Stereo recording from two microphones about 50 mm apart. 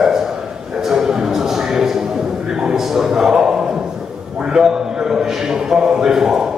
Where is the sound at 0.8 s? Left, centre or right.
Centre.